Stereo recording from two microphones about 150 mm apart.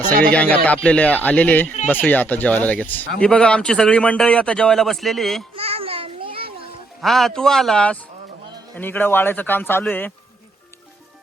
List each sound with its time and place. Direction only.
0.1 s speech: 85° right
0.3 s speech: 10° left (ahead or behind)
5.5 s a sound: 40° right (ahead or behind)
7.0 s a man's voice: centre (ahead or behind)